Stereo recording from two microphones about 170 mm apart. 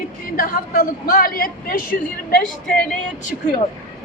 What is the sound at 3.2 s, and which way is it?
Speech, 45° left (ahead or behind).